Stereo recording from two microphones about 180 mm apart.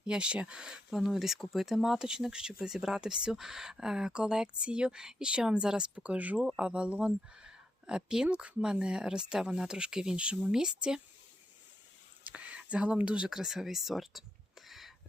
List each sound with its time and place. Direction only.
0.0 s speech: 5° right (ahead or behind)
12.2 s speech: 10° right (ahead or behind)
14.7 s a sound: centre (ahead or behind)